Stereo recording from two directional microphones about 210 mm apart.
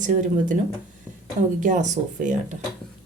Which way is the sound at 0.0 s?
40° right (ahead or behind).